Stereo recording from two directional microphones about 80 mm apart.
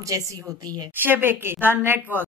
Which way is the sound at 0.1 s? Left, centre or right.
Right.